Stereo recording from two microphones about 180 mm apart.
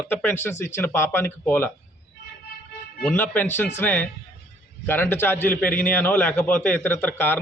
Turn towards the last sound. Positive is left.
turn(degrees=10)  # may be behind; listen again after turning